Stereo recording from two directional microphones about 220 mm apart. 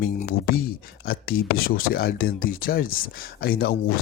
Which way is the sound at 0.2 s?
40° left (ahead or behind).